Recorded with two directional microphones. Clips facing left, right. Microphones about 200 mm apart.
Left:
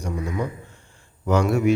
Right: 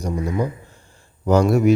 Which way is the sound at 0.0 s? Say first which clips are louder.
Right 4 dB; 35° right (ahead or behind).